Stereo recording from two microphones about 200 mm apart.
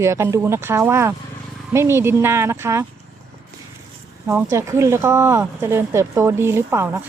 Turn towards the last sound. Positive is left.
turn(degrees=-10)  # may be behind; listen again after turning